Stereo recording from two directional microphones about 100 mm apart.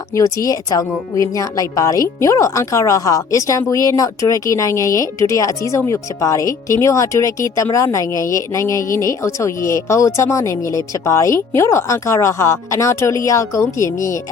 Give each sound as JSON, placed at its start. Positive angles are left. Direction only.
{"t": 0.2, "sound": "speech", "side_deg": 35}